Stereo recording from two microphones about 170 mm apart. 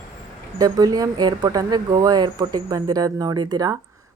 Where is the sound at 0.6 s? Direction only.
20° right (ahead or behind).